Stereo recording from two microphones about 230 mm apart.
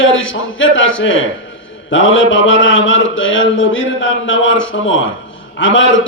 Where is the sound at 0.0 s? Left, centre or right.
Left.